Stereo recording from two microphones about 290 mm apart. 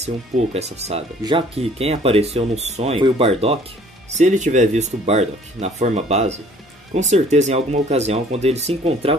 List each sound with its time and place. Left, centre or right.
0.0 s speech: right